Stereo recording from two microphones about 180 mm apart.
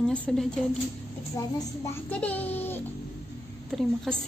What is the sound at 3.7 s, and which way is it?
Speech, centre (ahead or behind).